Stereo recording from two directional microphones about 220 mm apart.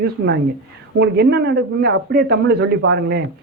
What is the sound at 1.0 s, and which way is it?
Speech, 50° right (ahead or behind).